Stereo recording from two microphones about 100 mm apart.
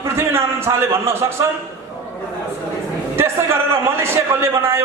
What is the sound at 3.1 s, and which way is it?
A man's voice, 25° right (ahead or behind).